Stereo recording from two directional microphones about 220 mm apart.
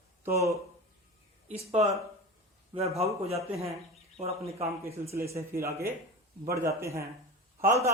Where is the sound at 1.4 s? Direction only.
30° right (ahead or behind).